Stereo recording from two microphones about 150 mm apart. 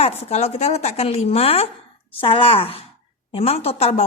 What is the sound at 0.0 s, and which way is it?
A woman's voice, 45° left (ahead or behind).